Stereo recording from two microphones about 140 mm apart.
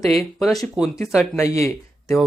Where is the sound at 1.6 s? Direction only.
20° left (ahead or behind).